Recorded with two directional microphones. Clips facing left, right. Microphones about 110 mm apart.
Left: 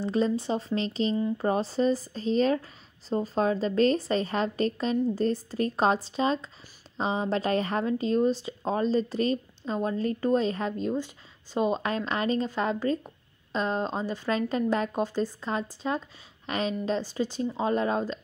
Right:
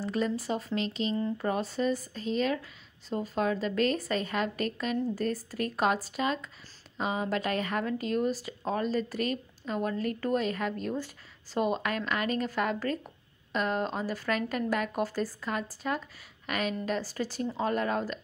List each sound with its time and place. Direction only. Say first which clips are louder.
0.0 s speech: left 4 dB; 25° left (ahead or behind)